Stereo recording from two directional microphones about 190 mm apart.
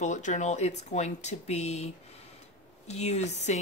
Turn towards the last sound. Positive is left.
turn(degrees=35)  # may be behind; listen again after turning